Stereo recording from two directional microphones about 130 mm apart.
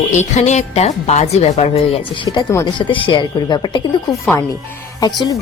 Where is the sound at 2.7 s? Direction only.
40° left (ahead or behind).